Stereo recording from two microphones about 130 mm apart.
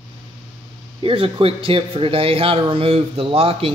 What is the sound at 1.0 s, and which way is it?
Speech, 45° right (ahead or behind).